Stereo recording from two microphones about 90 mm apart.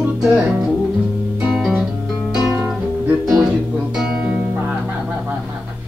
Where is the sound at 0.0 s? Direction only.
10° right (ahead or behind).